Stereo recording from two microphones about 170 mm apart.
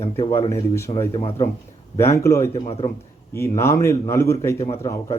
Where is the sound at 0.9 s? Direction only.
15° left (ahead or behind).